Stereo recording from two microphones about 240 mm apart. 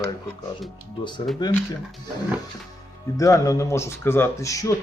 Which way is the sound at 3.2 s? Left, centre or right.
Centre.